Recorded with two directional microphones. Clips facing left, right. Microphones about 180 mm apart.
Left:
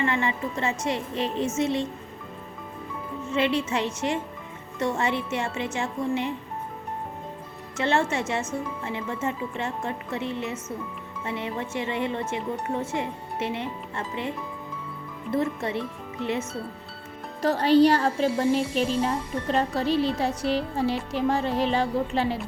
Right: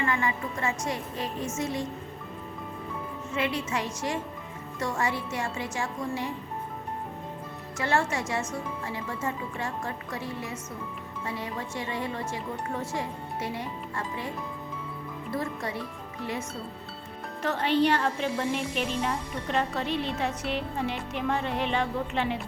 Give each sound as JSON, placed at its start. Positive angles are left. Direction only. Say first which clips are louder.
{"t": 0.0, "sound": "a woman's voice", "louder": "left 3 dB", "side_deg": 25}
{"t": 3.3, "sound": "speech", "louder": "left 5 dB", "side_deg": 25}
{"t": 7.8, "sound": "speech", "louder": "left 3 dB", "side_deg": 25}
{"t": 15.3, "sound": "speech", "louder": "left 6 dB", "side_deg": 25}
{"t": 17.4, "sound": "speech", "louder": "left 6 dB", "side_deg": 35}